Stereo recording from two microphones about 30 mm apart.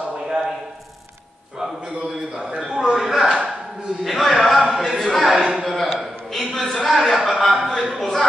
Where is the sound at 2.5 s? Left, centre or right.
Right.